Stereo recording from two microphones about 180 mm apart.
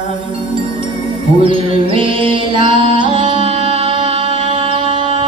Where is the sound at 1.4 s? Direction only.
30° right (ahead or behind).